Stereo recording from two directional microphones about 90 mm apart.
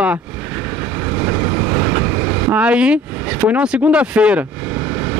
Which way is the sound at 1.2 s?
25° right (ahead or behind).